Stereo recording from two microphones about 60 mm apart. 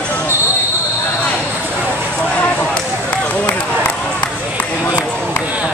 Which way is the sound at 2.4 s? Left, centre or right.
Left.